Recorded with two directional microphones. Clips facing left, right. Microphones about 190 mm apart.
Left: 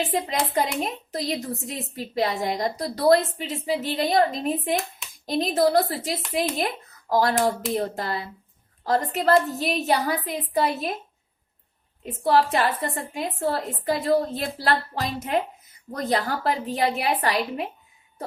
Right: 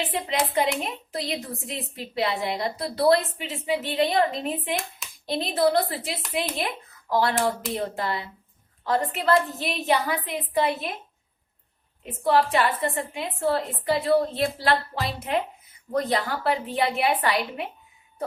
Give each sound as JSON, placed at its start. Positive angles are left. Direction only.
{"t": 0.1, "sound": "a woman's voice", "side_deg": 40}
{"t": 12.0, "sound": "a woman's voice", "side_deg": 40}